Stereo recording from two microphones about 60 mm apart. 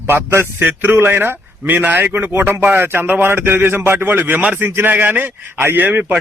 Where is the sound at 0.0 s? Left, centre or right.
Right.